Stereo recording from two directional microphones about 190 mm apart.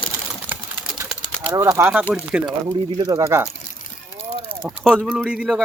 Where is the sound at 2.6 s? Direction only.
25° right (ahead or behind).